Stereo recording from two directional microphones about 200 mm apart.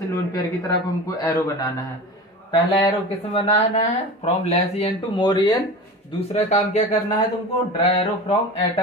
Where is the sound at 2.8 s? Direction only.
30° left (ahead or behind).